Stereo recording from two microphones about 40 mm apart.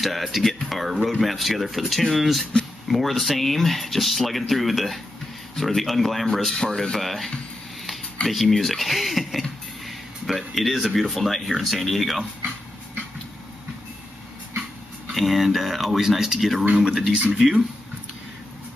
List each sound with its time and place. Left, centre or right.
0.0 s speech: centre
8.3 s speech: centre
15.1 s speech: centre; by 17.6 s right